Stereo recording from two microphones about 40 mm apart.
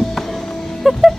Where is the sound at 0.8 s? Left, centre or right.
Centre.